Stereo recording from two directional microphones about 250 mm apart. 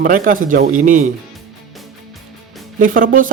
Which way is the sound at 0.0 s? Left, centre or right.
Right.